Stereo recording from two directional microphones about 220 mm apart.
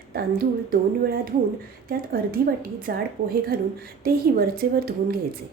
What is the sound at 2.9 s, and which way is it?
Speech, 45° right (ahead or behind).